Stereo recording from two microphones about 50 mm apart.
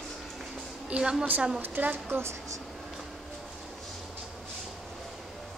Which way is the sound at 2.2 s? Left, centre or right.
Right.